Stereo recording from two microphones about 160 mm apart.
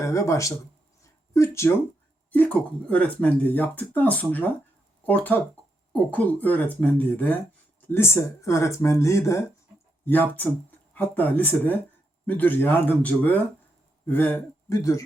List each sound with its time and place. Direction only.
0.0 s speech: 20° left (ahead or behind)